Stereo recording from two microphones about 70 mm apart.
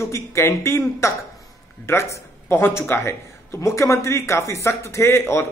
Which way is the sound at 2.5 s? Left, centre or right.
Left.